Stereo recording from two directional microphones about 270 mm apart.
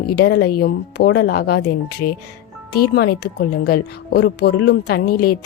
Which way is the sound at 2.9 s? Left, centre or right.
Left.